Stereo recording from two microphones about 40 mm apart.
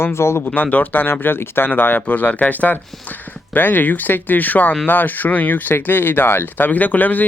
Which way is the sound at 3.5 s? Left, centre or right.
Left.